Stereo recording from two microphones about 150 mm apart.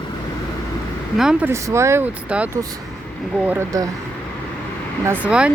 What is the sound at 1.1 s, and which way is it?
Speech, 5° right (ahead or behind).